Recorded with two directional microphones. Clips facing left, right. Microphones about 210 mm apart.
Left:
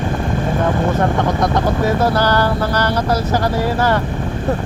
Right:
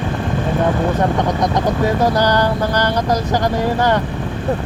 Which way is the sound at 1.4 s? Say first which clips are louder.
Even; 15° right (ahead or behind).